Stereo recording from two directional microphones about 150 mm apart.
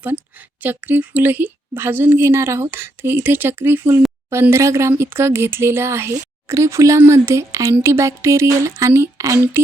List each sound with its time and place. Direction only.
0.6 s a woman's voice: 10° right (ahead or behind)